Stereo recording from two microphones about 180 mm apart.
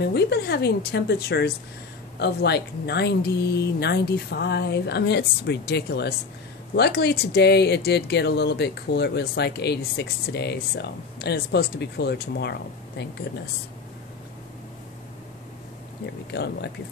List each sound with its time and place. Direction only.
0.0 s speech: 65° left (ahead or behind)
16.3 s speech: 70° left (ahead or behind)